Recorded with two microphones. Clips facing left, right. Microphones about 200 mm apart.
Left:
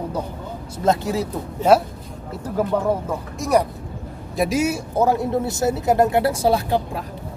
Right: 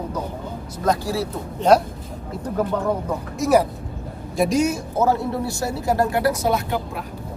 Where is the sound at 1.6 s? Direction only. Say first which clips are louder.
Even; 5° left (ahead or behind).